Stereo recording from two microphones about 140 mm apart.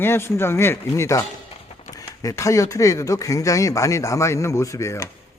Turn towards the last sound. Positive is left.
turn(degrees=20)  # may be behind; listen again after turning